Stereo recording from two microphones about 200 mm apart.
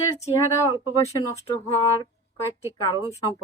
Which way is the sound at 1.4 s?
20° left (ahead or behind).